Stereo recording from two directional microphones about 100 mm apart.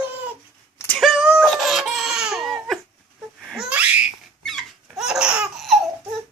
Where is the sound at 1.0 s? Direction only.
5° right (ahead or behind).